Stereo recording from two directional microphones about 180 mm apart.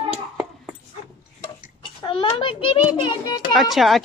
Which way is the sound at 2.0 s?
30° left (ahead or behind).